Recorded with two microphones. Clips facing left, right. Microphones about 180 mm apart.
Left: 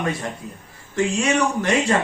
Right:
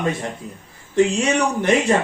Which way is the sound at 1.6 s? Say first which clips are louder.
Right 3 dB; 20° right (ahead or behind).